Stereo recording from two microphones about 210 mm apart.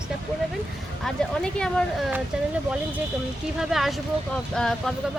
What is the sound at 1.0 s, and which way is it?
Speech, centre (ahead or behind).